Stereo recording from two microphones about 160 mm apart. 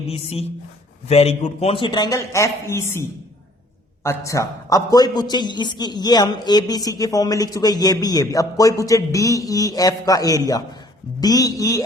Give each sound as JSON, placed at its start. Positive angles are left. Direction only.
{"t": 0.1, "sound": "a woman's voice", "side_deg": 40}
{"t": 4.0, "sound": "a man's voice", "side_deg": 20}